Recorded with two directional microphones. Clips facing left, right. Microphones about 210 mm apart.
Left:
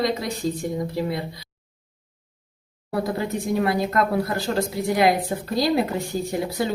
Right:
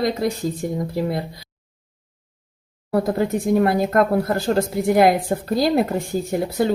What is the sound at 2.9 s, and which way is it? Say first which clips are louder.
Speech: right 5 dB; 50° right (ahead or behind).